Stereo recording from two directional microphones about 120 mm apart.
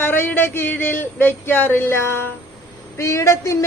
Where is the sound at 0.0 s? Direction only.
15° left (ahead or behind).